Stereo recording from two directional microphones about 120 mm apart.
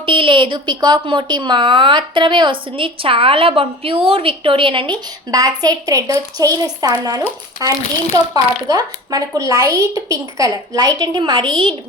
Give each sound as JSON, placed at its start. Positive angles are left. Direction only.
{"t": 0.0, "sound": "speech", "side_deg": -45}
{"t": 5.3, "sound": "a woman's voice", "side_deg": -30}